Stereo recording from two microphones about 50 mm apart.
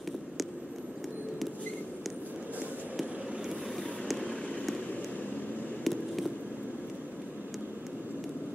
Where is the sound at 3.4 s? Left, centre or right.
Centre.